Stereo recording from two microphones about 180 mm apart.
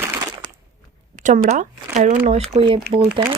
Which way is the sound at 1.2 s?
45° right (ahead or behind).